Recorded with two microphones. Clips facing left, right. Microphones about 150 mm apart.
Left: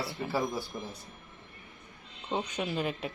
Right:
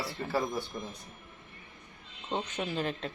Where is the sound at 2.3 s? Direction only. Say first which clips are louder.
Left 1 dB; 10° left (ahead or behind).